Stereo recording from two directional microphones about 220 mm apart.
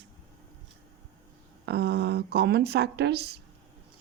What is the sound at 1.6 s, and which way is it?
Speech, 50° right (ahead or behind).